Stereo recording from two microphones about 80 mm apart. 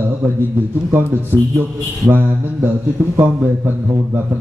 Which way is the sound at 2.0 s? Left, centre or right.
Right.